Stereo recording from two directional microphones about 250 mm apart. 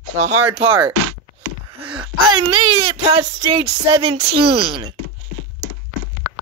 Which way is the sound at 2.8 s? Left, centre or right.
Right.